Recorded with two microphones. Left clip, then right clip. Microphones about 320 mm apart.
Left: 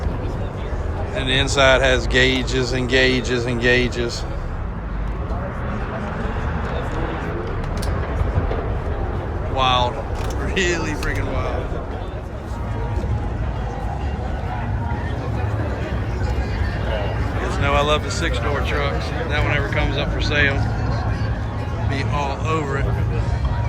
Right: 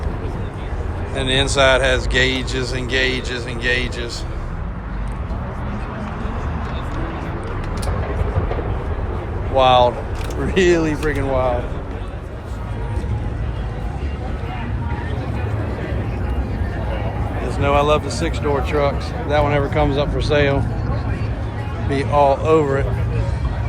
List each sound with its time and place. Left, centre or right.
1.1 s speech: centre
9.6 s speech: centre
17.6 s speech: centre
21.9 s speech: centre